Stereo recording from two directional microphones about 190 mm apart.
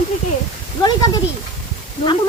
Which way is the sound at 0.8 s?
20° left (ahead or behind).